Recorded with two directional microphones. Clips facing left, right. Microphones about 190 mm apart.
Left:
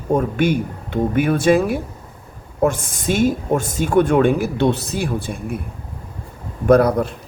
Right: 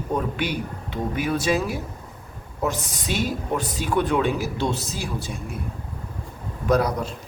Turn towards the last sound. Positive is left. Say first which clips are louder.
# left 8 dB
turn(degrees=55)  # may be behind; listen again after turning